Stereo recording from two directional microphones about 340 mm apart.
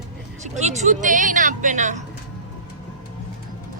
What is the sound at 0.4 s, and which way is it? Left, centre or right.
Speech, centre.